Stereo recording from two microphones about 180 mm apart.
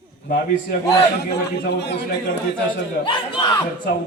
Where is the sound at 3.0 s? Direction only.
25° left (ahead or behind).